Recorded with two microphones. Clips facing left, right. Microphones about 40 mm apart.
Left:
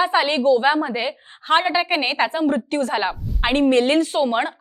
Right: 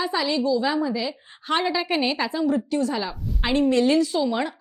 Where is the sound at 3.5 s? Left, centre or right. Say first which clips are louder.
Left 2 dB; left.